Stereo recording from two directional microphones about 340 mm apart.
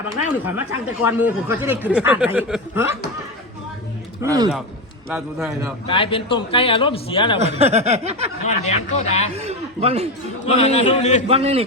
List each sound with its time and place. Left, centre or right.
1.0 s speech: centre
4.2 s speech: centre
5.9 s a man's voice: centre
7.3 s snicker: centre
8.4 s speech: centre
9.4 s speech: centre
10.4 s speech: centre
11.3 s speech: centre